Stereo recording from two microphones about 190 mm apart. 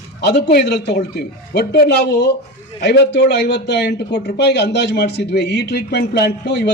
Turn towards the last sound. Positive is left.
turn(degrees=65)  # may be behind; listen again after turning